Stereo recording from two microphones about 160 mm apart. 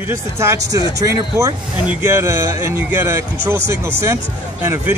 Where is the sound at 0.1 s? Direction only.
15° right (ahead or behind).